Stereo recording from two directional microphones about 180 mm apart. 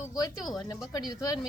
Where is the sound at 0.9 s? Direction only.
20° left (ahead or behind).